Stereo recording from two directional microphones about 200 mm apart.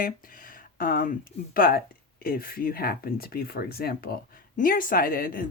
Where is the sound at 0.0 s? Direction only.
45° left (ahead or behind).